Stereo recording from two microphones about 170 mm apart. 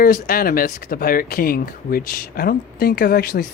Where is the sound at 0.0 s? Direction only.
60° left (ahead or behind).